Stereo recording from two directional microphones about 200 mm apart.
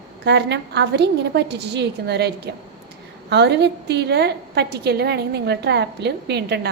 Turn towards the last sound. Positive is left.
turn(degrees=-55)  # may be behind; listen again after turning